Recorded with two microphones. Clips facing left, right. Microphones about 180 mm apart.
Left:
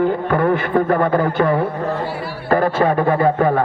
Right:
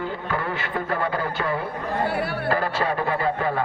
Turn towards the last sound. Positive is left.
turn(degrees=50)  # may be behind; listen again after turning